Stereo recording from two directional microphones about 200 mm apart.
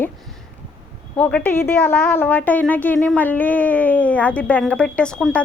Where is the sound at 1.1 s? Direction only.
10° left (ahead or behind).